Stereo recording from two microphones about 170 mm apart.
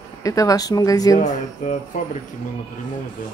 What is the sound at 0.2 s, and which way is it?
Speech, 20° left (ahead or behind).